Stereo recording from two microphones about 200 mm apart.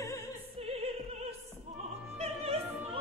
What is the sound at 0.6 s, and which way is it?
Opera, 30° right (ahead or behind).